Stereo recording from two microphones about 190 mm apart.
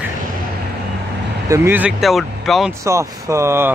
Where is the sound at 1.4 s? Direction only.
15° right (ahead or behind).